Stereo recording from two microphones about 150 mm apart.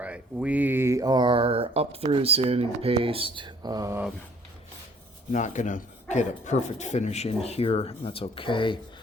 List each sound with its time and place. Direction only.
0.0 s speech: 10° right (ahead or behind)
5.3 s speech: 55° left (ahead or behind); by 8.8 s 35° left (ahead or behind)